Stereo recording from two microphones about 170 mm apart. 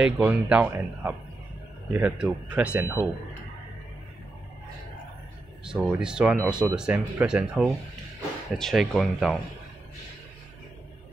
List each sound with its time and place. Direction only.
0.0 s speech: 10° right (ahead or behind)
5.7 s speech: 5° right (ahead or behind)